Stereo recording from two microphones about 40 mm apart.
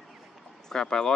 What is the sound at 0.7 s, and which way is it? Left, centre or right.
Speech, centre.